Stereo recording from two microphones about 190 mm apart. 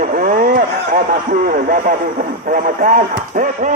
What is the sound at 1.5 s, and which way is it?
Speech, 50° right (ahead or behind).